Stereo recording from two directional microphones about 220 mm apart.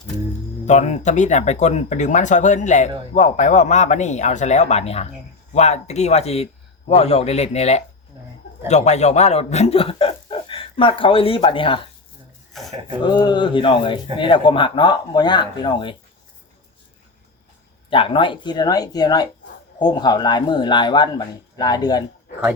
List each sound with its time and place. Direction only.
0.6 s a man's voice: 30° left (ahead or behind)
12.5 s filing: centre (ahead or behind)
13.0 s a man's voice: 20° left (ahead or behind)
17.8 s a man's voice: 25° left (ahead or behind)